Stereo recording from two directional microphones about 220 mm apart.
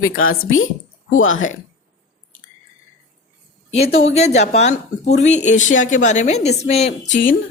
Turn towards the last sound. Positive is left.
turn(degrees=55)  # may be behind; listen again after turning